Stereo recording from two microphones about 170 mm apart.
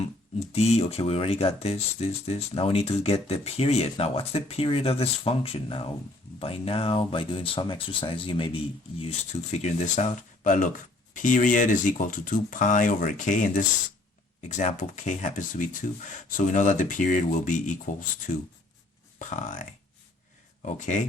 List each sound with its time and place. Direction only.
0.5 s speech: 40° left (ahead or behind)